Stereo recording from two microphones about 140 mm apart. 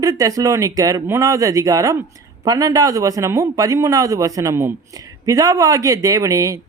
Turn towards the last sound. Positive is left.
turn(degrees=-25)  # may be behind; listen again after turning